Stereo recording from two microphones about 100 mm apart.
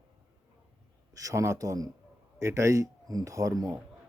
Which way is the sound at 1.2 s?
30° right (ahead or behind).